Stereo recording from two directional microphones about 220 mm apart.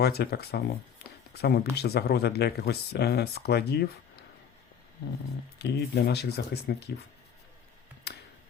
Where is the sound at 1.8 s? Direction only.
45° left (ahead or behind).